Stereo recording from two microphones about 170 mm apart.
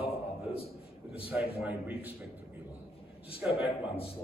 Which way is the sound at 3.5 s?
35° left (ahead or behind).